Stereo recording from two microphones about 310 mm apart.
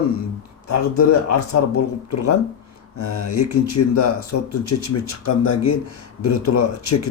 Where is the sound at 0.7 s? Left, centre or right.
Left.